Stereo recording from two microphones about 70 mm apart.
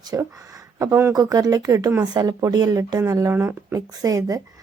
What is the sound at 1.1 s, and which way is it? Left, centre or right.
Speech, right.